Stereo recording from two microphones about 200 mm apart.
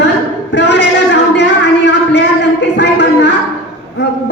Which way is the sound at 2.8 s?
60° left (ahead or behind).